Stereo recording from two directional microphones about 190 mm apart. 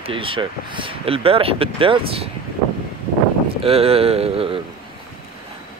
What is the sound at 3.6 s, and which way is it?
Speech, 30° right (ahead or behind).